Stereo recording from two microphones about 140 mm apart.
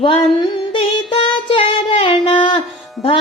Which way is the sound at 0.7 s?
35° left (ahead or behind).